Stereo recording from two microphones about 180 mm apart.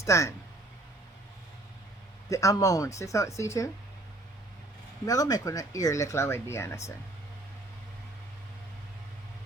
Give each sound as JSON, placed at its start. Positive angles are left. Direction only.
{"t": 0.0, "sound": "speech", "side_deg": 15}
{"t": 2.3, "sound": "speech", "side_deg": 15}
{"t": 5.0, "sound": "speech", "side_deg": 20}